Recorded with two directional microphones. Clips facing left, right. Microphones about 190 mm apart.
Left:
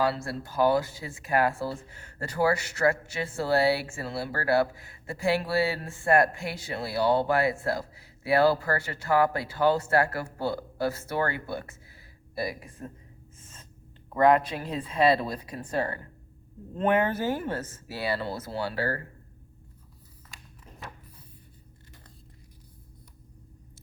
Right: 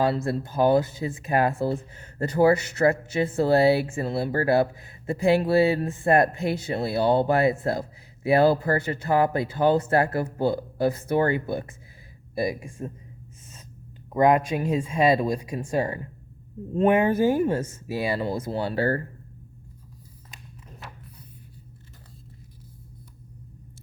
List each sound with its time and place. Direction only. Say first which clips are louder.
0.0 s speech: right 4 dB; 20° right (ahead or behind)
14.1 s speech: right 2 dB; 15° right (ahead or behind)
18.7 s speech: right 9 dB; 30° right (ahead or behind)